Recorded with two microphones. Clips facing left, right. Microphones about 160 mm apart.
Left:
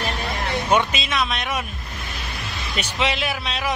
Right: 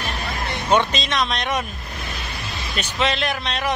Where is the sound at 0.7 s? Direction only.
10° left (ahead or behind).